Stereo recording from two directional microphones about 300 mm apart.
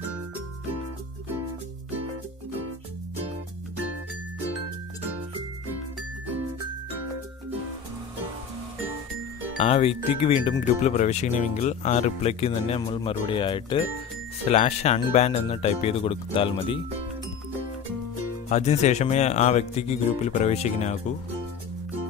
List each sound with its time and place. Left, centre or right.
9.6 s speech: centre
18.5 s speech: left